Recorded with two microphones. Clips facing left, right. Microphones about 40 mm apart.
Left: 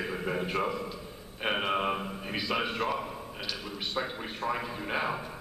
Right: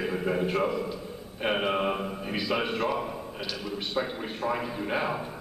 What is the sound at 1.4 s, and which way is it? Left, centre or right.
A man's voice, centre.